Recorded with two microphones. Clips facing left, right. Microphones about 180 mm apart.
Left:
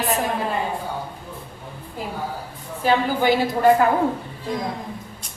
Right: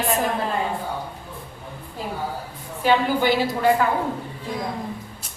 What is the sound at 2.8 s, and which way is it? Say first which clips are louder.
Speech: even; 45° left (ahead or behind).